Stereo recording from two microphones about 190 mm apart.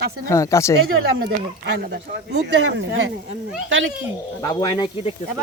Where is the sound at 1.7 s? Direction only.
60° right (ahead or behind); by 3.1 s 75° right (ahead or behind).